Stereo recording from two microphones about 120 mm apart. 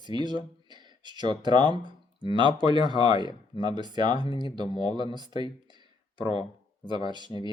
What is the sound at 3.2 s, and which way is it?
Speech, 35° left (ahead or behind).